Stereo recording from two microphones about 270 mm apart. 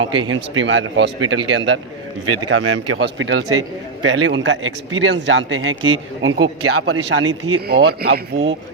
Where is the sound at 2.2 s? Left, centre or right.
Right.